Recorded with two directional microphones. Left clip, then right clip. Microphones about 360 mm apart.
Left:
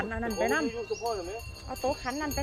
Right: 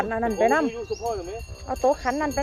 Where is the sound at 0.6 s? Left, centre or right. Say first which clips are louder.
Right 4 dB; right.